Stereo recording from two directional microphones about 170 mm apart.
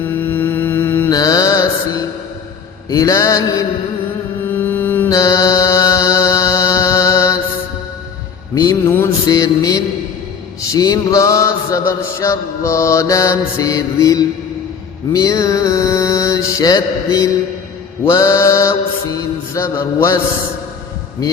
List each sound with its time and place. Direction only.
0.0 s mantra: 10° left (ahead or behind)
4.4 s music: 10° left (ahead or behind)
8.5 s music: 20° left (ahead or behind)
9.2 s mantra: 20° left (ahead or behind)